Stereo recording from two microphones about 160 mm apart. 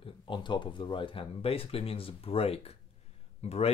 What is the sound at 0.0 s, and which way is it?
Speech, 30° left (ahead or behind).